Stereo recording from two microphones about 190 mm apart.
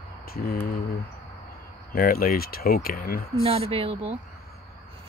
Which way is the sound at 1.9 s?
50° left (ahead or behind).